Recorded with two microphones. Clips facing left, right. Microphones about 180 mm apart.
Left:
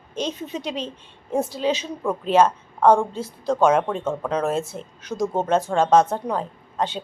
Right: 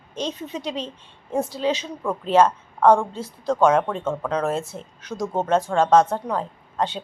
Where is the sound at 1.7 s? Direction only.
5° left (ahead or behind).